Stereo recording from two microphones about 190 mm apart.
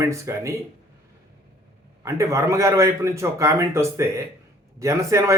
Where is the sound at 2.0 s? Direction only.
15° right (ahead or behind).